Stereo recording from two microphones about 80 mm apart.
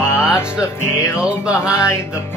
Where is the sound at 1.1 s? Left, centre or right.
Centre.